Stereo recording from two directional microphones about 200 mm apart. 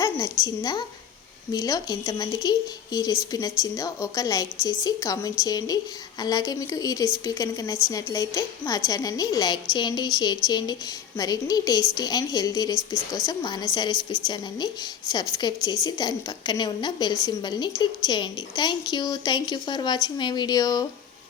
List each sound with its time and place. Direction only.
0.0 s a woman's voice: 20° left (ahead or behind)
15.1 s a woman's voice: 20° left (ahead or behind)